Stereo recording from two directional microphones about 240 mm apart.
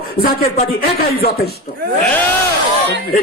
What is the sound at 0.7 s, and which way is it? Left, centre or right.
Speech, left.